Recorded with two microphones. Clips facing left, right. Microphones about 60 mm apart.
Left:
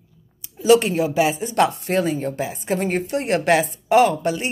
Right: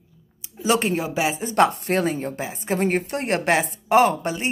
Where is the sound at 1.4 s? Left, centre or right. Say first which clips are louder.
Even; right.